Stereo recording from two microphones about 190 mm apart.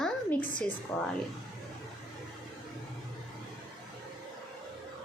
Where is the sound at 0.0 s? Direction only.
10° left (ahead or behind).